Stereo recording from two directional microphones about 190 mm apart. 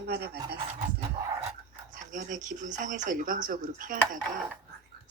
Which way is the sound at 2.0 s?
40° right (ahead or behind).